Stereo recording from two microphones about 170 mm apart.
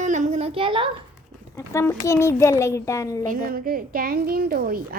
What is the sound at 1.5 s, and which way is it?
A child's voice, 15° left (ahead or behind).